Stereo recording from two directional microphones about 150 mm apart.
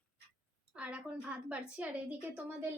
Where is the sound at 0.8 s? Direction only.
5° right (ahead or behind).